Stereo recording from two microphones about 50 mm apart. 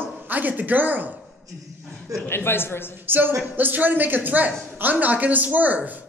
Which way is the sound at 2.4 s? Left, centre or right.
Left.